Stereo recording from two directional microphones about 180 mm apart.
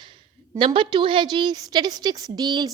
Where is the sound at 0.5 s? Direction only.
30° right (ahead or behind).